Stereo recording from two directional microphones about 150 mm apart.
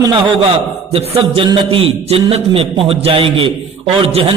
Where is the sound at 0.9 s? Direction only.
40° right (ahead or behind).